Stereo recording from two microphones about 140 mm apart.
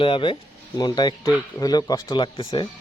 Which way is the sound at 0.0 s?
35° left (ahead or behind).